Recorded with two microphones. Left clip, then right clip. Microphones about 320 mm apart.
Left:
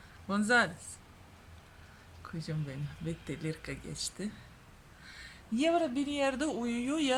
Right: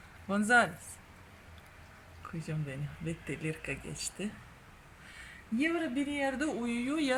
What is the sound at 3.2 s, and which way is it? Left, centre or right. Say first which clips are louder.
Speech: right 4 dB; centre.